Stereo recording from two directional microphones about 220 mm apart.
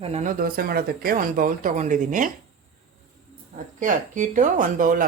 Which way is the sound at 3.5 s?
35° right (ahead or behind).